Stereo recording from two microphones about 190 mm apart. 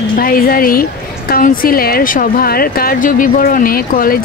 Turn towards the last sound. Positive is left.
turn(degrees=50)  # may be behind; listen again after turning